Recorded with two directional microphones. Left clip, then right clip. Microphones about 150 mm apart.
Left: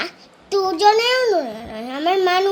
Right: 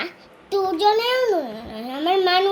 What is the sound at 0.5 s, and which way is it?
Child singing, 15° left (ahead or behind).